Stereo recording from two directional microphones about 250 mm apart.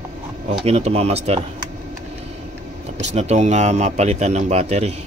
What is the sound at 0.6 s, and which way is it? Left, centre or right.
Speech, right.